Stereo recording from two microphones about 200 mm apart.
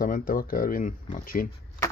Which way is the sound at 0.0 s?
45° left (ahead or behind).